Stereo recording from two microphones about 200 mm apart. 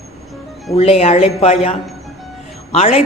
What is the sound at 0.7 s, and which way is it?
A woman's voice, 30° left (ahead or behind).